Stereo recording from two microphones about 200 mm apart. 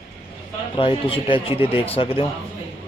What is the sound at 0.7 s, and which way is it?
Speech, 25° left (ahead or behind).